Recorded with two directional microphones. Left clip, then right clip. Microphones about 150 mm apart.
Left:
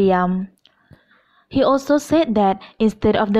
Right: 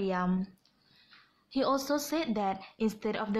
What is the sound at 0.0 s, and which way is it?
Speech, 55° left (ahead or behind).